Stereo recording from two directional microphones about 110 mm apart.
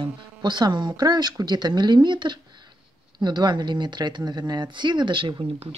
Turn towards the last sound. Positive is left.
turn(degrees=-55)  # may be behind; listen again after turning